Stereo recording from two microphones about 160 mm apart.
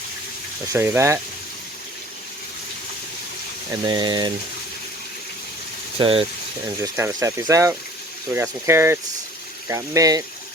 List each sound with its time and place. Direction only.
0.7 s speech: 15° right (ahead or behind)
3.7 s speech: 25° right (ahead or behind)
6.0 s speech: 35° right (ahead or behind)
6.8 s speech: 15° right (ahead or behind)